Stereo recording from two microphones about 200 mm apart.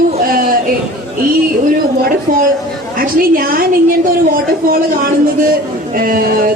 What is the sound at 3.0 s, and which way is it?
A woman's voice, 45° right (ahead or behind).